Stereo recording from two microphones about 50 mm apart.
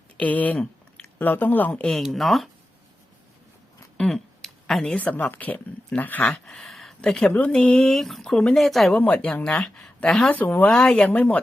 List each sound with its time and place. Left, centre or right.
0.2 s speech: left
2.1 s speech: centre
3.9 s a sound: centre
4.9 s speech: left
6.2 s speech: centre
8.9 s speech: left
9.1 s speech: centre
10.3 s speech: left
10.7 s speech: centre